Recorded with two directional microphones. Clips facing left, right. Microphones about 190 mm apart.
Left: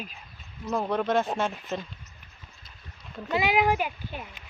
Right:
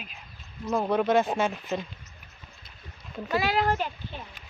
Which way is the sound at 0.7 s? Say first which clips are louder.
Right 2 dB; 5° right (ahead or behind).